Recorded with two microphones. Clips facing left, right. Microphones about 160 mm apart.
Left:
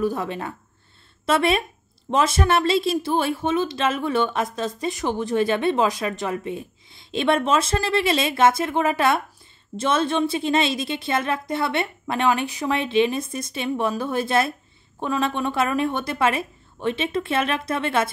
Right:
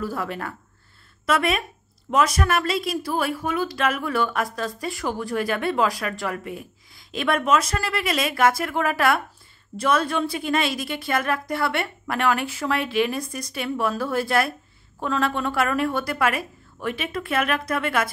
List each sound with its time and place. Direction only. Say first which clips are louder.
0.0 s a woman's voice: left 4 dB; 20° left (ahead or behind)